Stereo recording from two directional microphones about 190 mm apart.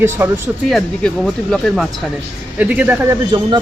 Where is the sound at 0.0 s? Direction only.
10° right (ahead or behind).